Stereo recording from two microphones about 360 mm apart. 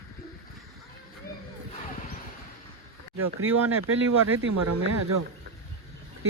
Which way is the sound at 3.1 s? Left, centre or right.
Right.